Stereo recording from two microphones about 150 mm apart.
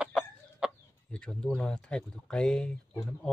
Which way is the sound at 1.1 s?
5° left (ahead or behind).